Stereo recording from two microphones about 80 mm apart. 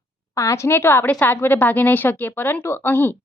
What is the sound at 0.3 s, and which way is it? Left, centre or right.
A woman's voice, left.